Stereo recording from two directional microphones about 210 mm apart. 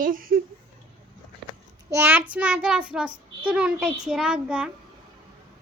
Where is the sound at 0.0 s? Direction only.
40° right (ahead or behind).